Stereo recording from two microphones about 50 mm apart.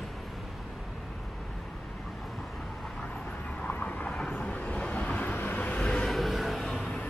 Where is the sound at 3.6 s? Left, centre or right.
Left.